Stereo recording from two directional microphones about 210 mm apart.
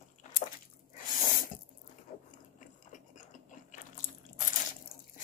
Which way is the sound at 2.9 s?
35° left (ahead or behind).